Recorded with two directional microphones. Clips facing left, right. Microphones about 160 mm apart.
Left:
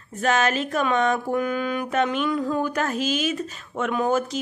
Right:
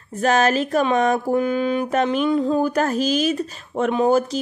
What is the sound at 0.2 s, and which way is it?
Mantra, 35° right (ahead or behind).